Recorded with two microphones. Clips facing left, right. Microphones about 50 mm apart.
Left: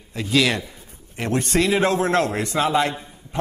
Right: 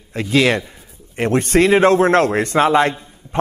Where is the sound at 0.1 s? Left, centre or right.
Right.